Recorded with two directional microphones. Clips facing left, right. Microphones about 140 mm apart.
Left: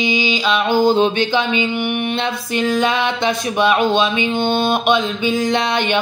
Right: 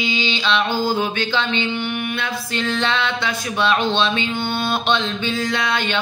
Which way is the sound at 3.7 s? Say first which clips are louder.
Left 3 dB; 10° left (ahead or behind).